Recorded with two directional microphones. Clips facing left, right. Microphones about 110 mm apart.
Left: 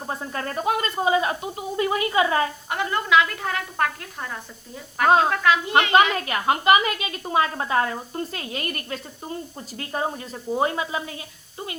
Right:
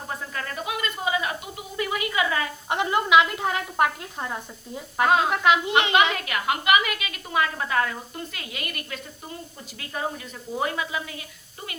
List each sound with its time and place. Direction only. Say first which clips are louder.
0.1 s a woman's voice: left 4 dB; 35° left (ahead or behind)
2.6 s a woman's voice: right 1 dB; 20° right (ahead or behind)
5.0 s a woman's voice: left 4 dB; 35° left (ahead or behind)
5.3 s a woman's voice: even; 20° right (ahead or behind)
6.1 s a woman's voice: left 4 dB; 35° left (ahead or behind)